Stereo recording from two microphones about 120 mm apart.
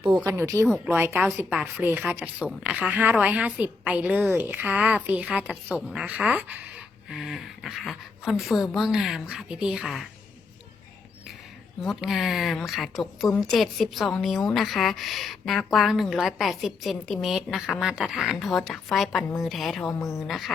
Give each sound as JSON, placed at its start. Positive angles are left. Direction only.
{"t": 0.3, "sound": "a woman's voice", "side_deg": -25}
{"t": 11.8, "sound": "speech", "side_deg": 0}